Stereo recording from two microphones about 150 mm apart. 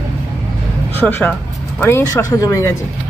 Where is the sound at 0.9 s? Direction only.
15° left (ahead or behind).